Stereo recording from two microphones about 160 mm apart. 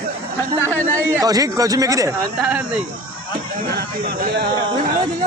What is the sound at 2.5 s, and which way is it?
Speech, 10° right (ahead or behind).